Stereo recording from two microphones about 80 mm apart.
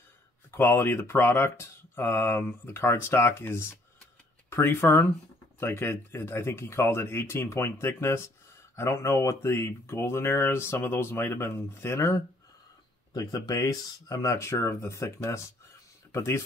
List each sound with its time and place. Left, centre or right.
0.5 s speech: left
13.1 s speech: left